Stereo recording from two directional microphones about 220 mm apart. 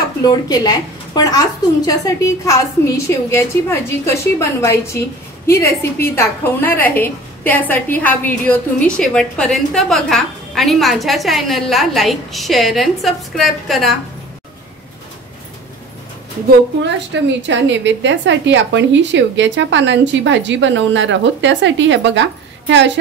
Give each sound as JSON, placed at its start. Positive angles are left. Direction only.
{"t": 0.2, "sound": "a woman's voice", "side_deg": 20}
{"t": 16.4, "sound": "a woman's voice", "side_deg": -55}